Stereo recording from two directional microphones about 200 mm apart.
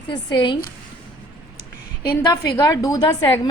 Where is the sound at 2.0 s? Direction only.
55° left (ahead or behind).